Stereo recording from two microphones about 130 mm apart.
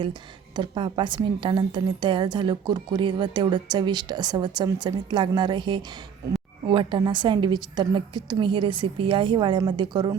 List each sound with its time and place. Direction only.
0.0 s a woman's voice: 35° right (ahead or behind)